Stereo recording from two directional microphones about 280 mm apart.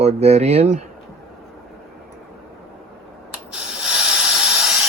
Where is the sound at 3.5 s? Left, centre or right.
Centre.